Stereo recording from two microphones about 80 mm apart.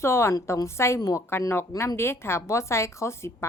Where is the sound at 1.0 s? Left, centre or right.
Left.